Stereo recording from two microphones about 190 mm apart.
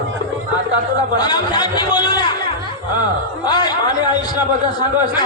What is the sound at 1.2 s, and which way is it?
Speech, 20° left (ahead or behind).